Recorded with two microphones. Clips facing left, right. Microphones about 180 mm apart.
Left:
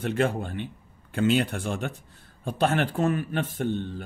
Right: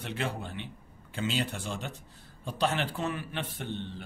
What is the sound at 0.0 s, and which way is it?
A man's voice, 50° left (ahead or behind).